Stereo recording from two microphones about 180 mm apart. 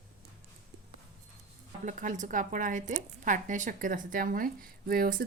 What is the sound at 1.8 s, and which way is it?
Speech, 45° right (ahead or behind).